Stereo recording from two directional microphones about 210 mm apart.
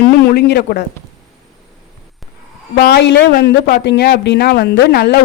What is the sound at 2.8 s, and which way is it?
A woman's voice, 50° left (ahead or behind).